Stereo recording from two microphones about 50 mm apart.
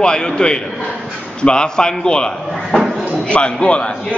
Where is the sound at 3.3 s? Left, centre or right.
Left.